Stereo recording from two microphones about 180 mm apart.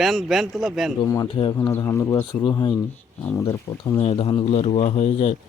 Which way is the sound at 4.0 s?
30° left (ahead or behind).